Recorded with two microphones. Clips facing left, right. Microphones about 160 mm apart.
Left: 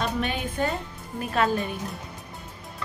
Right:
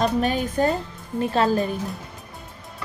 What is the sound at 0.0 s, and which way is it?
A woman's voice, 40° right (ahead or behind).